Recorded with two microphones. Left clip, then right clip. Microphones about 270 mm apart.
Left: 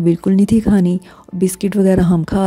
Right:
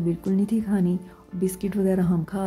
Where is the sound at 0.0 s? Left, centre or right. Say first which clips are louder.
Left 11 dB; left.